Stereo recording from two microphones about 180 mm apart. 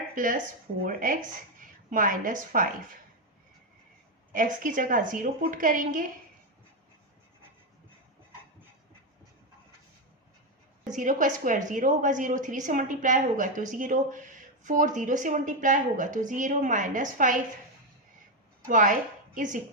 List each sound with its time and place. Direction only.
0.1 s speech: 50° right (ahead or behind)
4.3 s a woman's voice: 45° right (ahead or behind)
10.8 s a woman's voice: 45° right (ahead or behind)
18.6 s a woman's voice: 45° right (ahead or behind)